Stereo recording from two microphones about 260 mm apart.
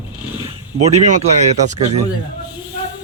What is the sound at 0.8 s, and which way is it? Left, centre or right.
Speech, right.